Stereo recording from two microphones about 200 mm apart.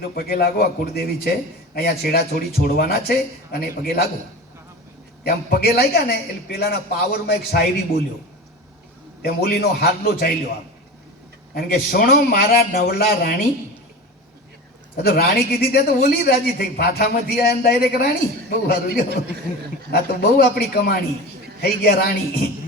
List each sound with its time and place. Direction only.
0.2 s a man's voice: 50° left (ahead or behind)
5.2 s a man's voice: 50° left (ahead or behind)
9.2 s a man's voice: 50° left (ahead or behind)
11.5 s a man's voice: 50° left (ahead or behind)
14.9 s a man's voice: 50° left (ahead or behind)